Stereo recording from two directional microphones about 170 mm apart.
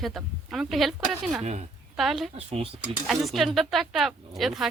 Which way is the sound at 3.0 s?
Centre (ahead or behind).